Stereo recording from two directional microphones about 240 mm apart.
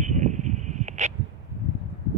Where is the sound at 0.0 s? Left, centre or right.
Right.